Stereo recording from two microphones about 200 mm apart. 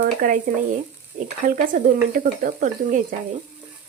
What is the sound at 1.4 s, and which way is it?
Speech, 45° right (ahead or behind).